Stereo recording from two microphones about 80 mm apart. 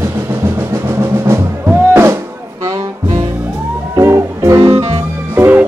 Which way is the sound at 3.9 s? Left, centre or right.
Right.